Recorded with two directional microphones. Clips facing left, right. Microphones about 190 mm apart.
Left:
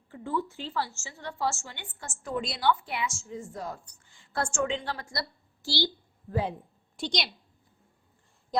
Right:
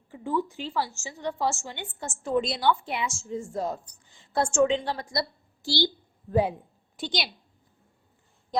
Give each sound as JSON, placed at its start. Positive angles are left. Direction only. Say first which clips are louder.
{"t": 0.1, "sound": "a woman's voice", "louder": "right 3 dB", "side_deg": -15}
{"t": 6.5, "sound": "a woman's voice", "louder": "right 1 dB", "side_deg": 0}